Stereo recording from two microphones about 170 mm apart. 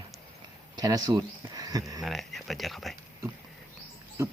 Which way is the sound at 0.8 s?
25° right (ahead or behind).